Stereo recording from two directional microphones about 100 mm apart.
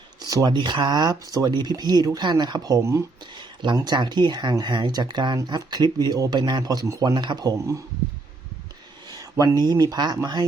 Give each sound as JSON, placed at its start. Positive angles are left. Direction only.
{"t": 0.2, "sound": "speech", "side_deg": -40}
{"t": 7.1, "sound": "speech", "side_deg": -50}
{"t": 9.0, "sound": "speech", "side_deg": -40}